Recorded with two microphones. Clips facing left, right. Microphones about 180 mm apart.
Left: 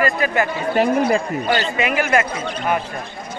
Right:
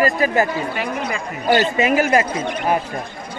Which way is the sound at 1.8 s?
40° right (ahead or behind).